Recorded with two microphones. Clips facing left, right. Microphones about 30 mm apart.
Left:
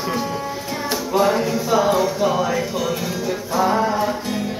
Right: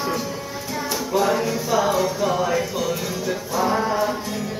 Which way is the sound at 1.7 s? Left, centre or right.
Left.